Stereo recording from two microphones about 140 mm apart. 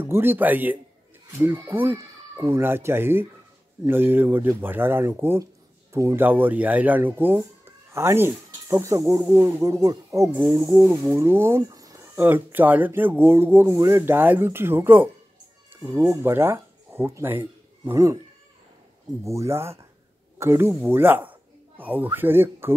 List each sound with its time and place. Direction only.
0.0 s speech: 15° right (ahead or behind)
19.2 s speech: 20° right (ahead or behind)